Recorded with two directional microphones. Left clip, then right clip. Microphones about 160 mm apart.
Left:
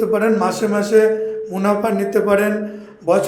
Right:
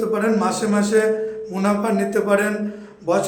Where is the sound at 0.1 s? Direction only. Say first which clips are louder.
Left 3 dB; 15° left (ahead or behind).